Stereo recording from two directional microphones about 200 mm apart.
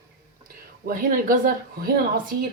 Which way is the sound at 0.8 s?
45° right (ahead or behind).